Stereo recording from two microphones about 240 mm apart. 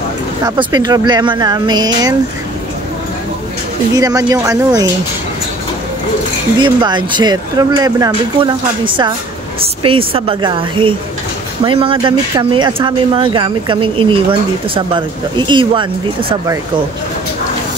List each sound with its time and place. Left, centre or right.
0.6 s speech: centre
3.9 s speech: centre
6.6 s speech: centre